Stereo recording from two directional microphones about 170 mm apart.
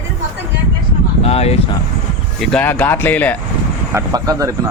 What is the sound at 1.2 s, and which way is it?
Speech, 35° left (ahead or behind).